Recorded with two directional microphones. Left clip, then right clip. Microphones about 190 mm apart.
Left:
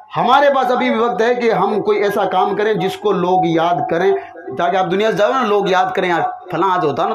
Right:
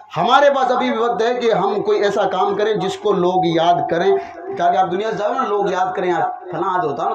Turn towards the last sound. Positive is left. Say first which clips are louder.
# left 4 dB
turn(degrees=50)  # may be behind; listen again after turning